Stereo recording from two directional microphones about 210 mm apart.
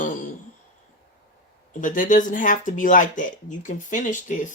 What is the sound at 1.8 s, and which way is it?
Speech, 40° left (ahead or behind).